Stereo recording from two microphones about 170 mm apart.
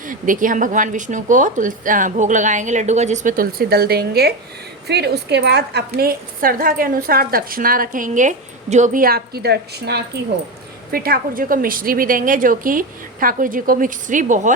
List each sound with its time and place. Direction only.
0.0 s speech: 50° right (ahead or behind); by 5.8 s 75° right (ahead or behind)
6.0 s a woman's voice: 60° right (ahead or behind); by 10.0 s 75° right (ahead or behind)
10.9 s speech: 60° right (ahead or behind)